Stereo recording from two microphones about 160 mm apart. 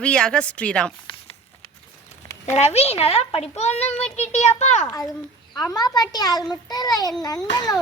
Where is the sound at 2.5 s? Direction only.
40° left (ahead or behind).